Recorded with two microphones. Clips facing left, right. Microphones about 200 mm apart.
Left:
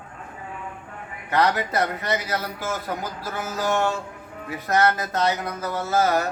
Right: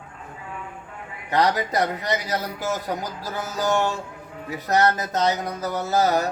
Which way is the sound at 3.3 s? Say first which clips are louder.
Right 1 dB; 40° right (ahead or behind).